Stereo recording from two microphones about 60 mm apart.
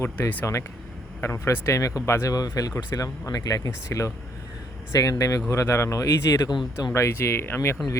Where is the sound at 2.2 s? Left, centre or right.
Left.